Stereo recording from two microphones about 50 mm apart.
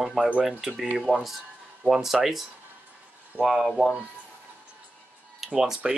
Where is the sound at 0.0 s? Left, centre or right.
Centre.